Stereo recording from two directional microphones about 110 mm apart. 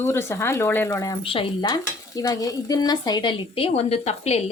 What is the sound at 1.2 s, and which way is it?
Speech, 55° left (ahead or behind).